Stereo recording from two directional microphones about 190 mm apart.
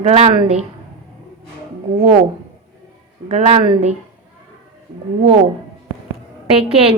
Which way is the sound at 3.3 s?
35° right (ahead or behind).